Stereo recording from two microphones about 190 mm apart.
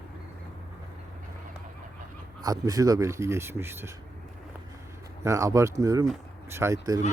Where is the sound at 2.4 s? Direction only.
20° right (ahead or behind).